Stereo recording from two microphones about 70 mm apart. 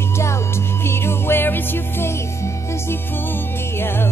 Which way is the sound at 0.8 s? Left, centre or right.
Left.